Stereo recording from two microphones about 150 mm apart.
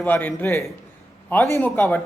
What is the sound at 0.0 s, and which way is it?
Speech, 10° left (ahead or behind).